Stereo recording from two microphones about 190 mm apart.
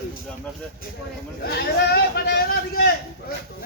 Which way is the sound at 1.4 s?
55° left (ahead or behind).